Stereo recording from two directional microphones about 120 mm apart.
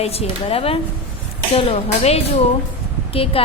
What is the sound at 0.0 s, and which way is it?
Speech, 60° left (ahead or behind).